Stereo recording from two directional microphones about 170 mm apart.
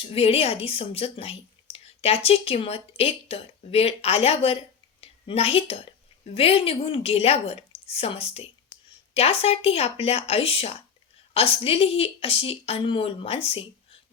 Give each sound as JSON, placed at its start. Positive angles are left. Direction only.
{"t": 0.0, "sound": "a woman's voice", "side_deg": 35}